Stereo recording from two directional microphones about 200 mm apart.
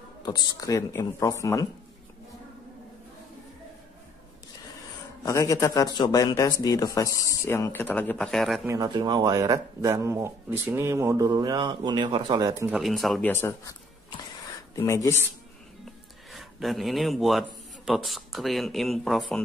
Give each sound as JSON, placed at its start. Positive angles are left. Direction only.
{"t": 0.2, "sound": "a man's voice", "side_deg": 20}
{"t": 5.2, "sound": "a man's voice", "side_deg": 15}
{"t": 8.6, "sound": "speech", "side_deg": -20}
{"t": 12.7, "sound": "a man's voice", "side_deg": 0}
{"t": 16.3, "sound": "speech", "side_deg": 0}